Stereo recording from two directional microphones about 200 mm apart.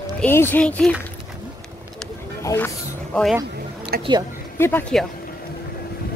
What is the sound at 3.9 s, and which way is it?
Speech, 50° right (ahead or behind).